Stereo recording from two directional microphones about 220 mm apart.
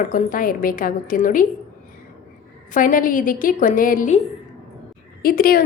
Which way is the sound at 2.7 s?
40° left (ahead or behind).